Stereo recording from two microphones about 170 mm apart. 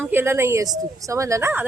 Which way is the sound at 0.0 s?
10° right (ahead or behind).